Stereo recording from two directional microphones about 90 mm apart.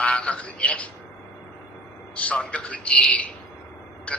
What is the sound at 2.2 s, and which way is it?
A man's voice, 15° left (ahead or behind).